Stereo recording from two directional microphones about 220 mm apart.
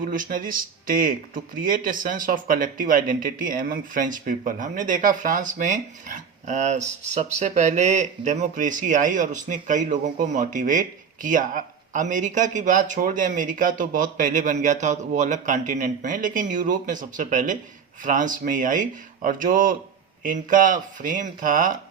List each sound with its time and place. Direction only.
0.0 s speech: 40° right (ahead or behind)